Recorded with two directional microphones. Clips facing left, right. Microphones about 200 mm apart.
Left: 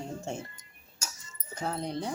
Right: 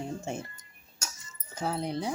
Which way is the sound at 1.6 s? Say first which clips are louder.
Right 2 dB; 5° right (ahead or behind).